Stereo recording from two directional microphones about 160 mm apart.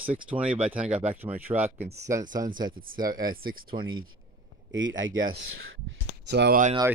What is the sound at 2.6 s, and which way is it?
Speech, 60° right (ahead or behind).